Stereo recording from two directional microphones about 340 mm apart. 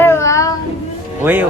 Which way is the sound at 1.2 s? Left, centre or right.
Centre.